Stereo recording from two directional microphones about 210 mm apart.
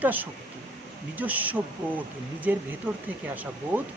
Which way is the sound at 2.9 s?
10° right (ahead or behind).